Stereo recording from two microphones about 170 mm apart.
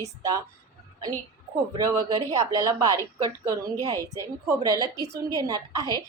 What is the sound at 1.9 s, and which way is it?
A woman's voice, 20° right (ahead or behind).